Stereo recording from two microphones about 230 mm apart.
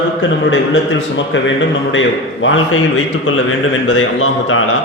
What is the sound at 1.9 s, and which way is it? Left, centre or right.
Speech, left.